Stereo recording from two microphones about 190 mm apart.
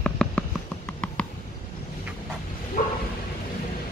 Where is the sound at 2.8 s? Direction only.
50° left (ahead or behind).